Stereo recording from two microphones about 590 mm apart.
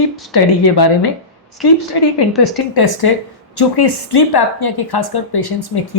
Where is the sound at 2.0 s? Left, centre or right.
Left.